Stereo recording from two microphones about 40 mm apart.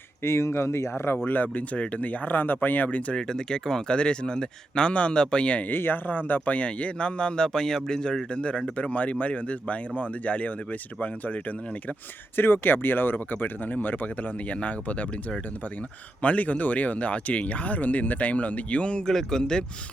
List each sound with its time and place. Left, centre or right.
0.2 s speech: left
1.2 s speech: left
3.1 s speech: centre
5.6 s speech: left; by 8.2 s centre
8.3 s speech: left
12.4 s speech: left
19.0 s speech: centre